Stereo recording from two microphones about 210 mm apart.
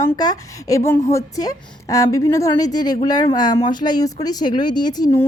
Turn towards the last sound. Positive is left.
turn(degrees=20)  # may be behind; listen again after turning